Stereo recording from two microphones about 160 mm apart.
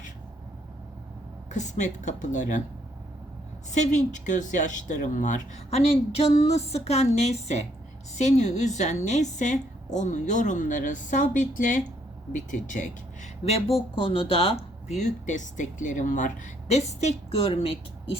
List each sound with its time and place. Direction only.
1.5 s speech: 50° left (ahead or behind)
3.7 s speech: 45° left (ahead or behind)
13.4 s speech: 40° left (ahead or behind)